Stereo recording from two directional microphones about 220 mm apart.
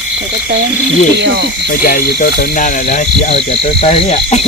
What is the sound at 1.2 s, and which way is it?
Hoot, 50° right (ahead or behind).